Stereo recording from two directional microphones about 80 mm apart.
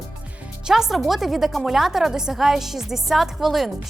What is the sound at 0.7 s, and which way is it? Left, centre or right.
A woman's voice, centre.